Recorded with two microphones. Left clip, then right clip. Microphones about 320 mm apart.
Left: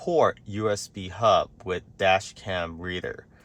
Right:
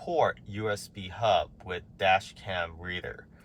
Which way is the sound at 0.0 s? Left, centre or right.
Left.